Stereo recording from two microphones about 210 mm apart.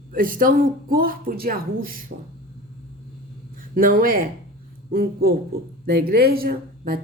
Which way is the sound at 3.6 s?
40° right (ahead or behind).